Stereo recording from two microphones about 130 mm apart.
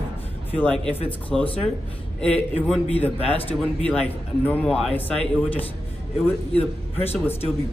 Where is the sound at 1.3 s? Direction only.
5° left (ahead or behind).